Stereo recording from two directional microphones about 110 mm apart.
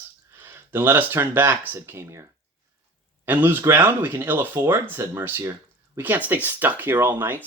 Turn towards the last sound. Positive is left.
turn(degrees=-20)  # may be behind; listen again after turning